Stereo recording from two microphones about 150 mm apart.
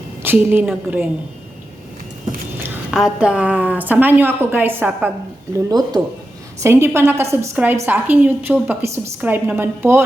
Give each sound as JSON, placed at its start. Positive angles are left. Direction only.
{"t": 0.2, "sound": "a woman's voice", "side_deg": -15}
{"t": 2.9, "sound": "a woman's voice", "side_deg": -5}
{"t": 5.5, "sound": "speech", "side_deg": -25}
{"t": 6.6, "sound": "a woman's voice", "side_deg": -15}